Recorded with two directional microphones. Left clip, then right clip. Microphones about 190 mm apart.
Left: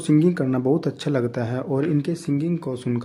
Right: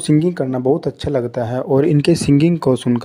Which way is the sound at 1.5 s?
40° right (ahead or behind).